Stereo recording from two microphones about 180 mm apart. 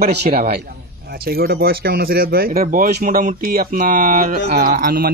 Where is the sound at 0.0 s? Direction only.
60° right (ahead or behind).